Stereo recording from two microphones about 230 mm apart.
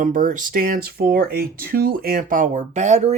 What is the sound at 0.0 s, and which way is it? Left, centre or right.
Speech, right.